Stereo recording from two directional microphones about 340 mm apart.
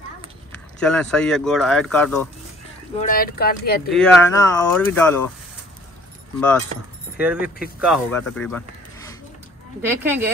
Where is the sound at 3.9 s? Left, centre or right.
Centre.